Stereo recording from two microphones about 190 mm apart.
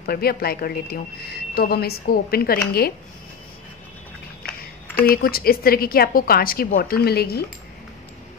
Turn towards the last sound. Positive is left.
turn(degrees=55)  # may be behind; listen again after turning